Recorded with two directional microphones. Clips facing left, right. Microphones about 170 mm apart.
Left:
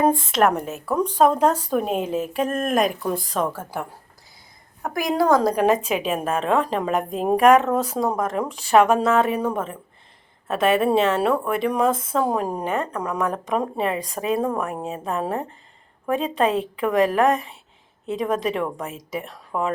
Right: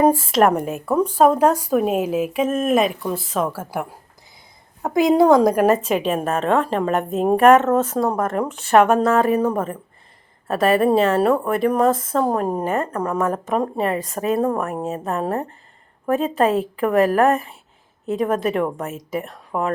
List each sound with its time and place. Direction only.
0.0 s speech: 5° right (ahead or behind)
4.8 s a woman's voice: 20° right (ahead or behind)
5.5 s a woman's voice: 5° right (ahead or behind)
11.1 s a woman's voice: 5° right (ahead or behind)